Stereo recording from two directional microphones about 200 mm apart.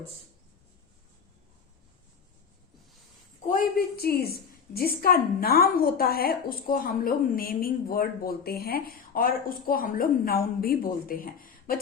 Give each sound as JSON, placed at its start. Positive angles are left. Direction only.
{"t": 3.4, "sound": "a woman's voice", "side_deg": 45}